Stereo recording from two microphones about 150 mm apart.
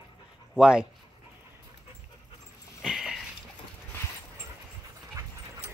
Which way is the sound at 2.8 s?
Centre (ahead or behind).